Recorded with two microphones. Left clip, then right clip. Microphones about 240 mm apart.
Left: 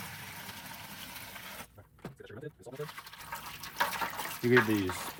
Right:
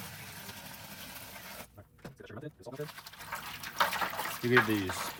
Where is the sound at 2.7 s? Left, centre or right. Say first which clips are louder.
Even; centre.